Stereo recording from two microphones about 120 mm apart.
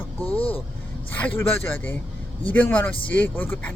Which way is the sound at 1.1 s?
15° left (ahead or behind).